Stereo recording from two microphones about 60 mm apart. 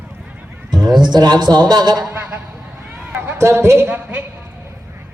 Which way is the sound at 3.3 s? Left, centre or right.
Right.